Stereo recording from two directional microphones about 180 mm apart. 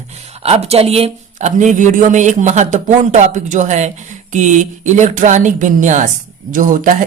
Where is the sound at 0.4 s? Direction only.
35° right (ahead or behind).